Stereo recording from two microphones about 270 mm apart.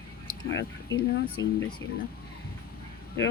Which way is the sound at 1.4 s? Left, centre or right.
Left.